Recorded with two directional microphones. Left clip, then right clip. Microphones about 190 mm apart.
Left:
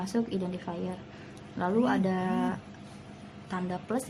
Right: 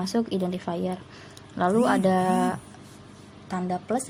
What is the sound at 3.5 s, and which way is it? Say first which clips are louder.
Speech: right 5 dB; 25° right (ahead or behind).